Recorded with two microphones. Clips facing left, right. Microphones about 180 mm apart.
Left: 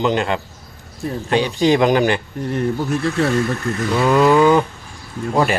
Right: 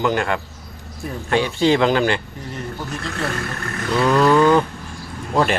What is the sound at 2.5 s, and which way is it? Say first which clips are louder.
Speech: left 9 dB; 60° left (ahead or behind).